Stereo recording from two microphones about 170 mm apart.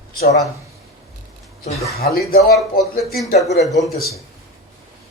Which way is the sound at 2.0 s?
65° left (ahead or behind).